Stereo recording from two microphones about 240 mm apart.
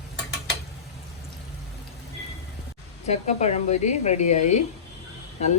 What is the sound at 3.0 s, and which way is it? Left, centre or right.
Speech, left.